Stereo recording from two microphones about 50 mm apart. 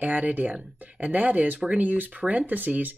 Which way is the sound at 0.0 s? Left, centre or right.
Right.